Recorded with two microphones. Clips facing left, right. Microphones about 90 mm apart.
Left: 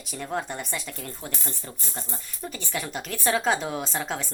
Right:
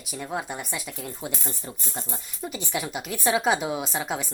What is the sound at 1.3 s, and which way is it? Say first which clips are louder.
A woman's voice: right 2 dB; 15° right (ahead or behind).